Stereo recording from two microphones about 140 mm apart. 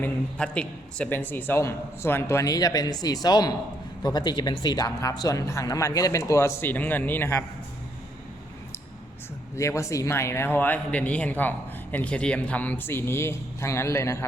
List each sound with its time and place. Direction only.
0.0 s a man's voice: 10° left (ahead or behind)
9.6 s speech: 20° left (ahead or behind)